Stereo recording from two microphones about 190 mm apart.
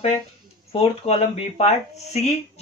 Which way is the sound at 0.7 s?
30° left (ahead or behind).